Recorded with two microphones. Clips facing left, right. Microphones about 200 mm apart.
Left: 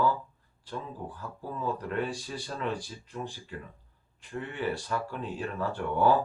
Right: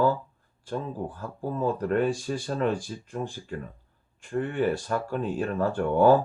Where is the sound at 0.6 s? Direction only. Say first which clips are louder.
Right 7 dB; 50° right (ahead or behind).